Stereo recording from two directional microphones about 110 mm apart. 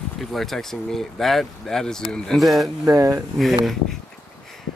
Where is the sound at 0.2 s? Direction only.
Centre (ahead or behind).